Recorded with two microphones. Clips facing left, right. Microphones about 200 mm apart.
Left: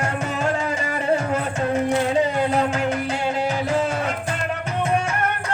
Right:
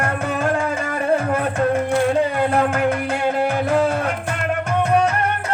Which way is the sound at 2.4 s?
55° right (ahead or behind).